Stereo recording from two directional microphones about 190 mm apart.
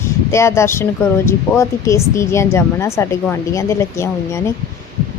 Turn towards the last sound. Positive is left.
turn(degrees=15)  # may be behind; listen again after turning